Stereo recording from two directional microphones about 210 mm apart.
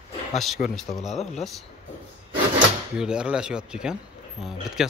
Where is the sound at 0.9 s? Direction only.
30° left (ahead or behind).